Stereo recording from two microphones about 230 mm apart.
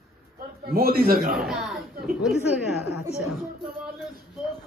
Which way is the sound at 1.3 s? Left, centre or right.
Centre.